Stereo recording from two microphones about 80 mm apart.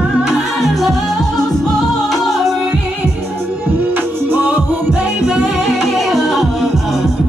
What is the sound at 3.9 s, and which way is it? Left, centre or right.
Music, right.